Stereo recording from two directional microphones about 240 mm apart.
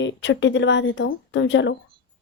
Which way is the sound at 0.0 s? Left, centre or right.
Left.